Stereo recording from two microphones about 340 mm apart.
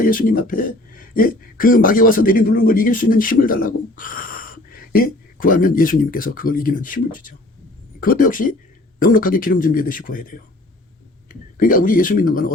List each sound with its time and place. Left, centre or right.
0.0 s speech: left